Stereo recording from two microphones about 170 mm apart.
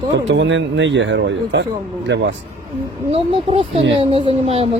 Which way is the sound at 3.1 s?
35° right (ahead or behind).